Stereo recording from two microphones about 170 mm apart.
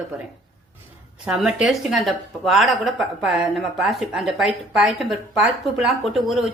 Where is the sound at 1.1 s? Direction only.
5° right (ahead or behind).